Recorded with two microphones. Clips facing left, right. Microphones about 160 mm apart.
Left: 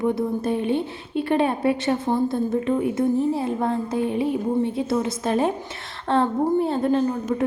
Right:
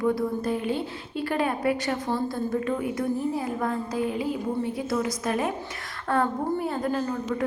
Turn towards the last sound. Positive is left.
turn(degrees=25)  # may be behind; listen again after turning